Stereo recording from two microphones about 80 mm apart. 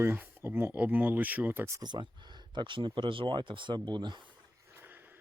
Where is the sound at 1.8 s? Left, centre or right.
Right.